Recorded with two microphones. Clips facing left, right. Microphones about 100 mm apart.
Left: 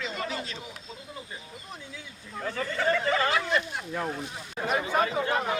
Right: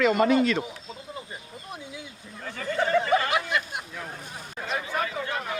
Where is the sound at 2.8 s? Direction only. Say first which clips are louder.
Right 4 dB; 20° right (ahead or behind).